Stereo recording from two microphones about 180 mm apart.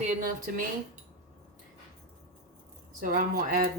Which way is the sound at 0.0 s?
50° right (ahead or behind).